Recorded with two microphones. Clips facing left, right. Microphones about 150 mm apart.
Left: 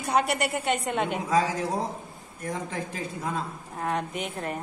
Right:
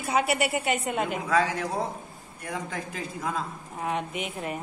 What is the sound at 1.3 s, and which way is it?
Speech, 35° left (ahead or behind).